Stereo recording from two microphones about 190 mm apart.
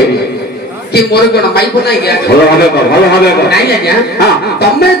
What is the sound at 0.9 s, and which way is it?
A man's voice, 60° left (ahead or behind).